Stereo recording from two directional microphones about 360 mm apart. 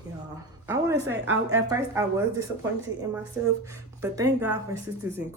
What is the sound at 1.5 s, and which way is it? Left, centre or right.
A woman's voice, centre.